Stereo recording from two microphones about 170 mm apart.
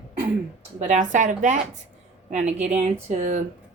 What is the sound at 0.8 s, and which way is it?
Speech, 45° right (ahead or behind).